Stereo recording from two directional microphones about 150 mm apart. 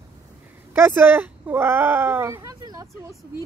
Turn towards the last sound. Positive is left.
turn(degrees=-25)  # may be behind; listen again after turning